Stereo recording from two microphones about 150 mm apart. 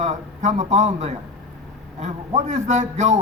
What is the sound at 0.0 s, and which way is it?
A man's voice, 50° right (ahead or behind).